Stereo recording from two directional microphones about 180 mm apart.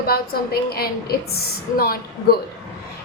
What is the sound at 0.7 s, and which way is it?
A woman's voice, 55° left (ahead or behind).